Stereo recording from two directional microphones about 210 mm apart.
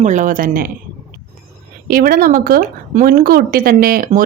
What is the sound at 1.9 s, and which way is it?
Speech, 45° right (ahead or behind).